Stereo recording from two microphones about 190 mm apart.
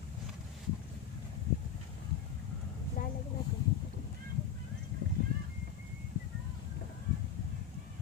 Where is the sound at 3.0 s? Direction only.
40° left (ahead or behind).